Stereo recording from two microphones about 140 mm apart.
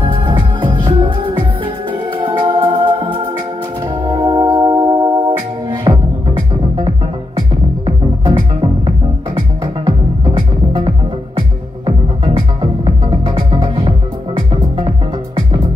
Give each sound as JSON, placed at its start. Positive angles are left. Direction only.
{"t": 0.0, "sound": "music", "side_deg": -35}
{"t": 2.3, "sound": "music", "side_deg": -35}
{"t": 12.4, "sound": "music", "side_deg": -40}
{"t": 14.5, "sound": "music", "side_deg": -40}